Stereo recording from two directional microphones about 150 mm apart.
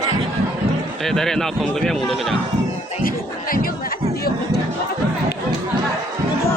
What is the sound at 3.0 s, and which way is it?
Chatter, 70° left (ahead or behind).